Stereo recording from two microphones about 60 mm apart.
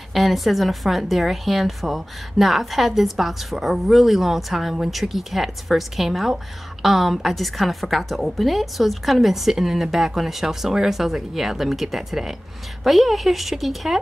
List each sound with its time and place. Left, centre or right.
0.1 s a woman's voice: centre